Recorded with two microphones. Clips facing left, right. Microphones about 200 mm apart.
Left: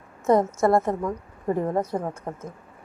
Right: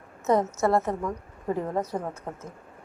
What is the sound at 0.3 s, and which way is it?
Speech, 10° left (ahead or behind).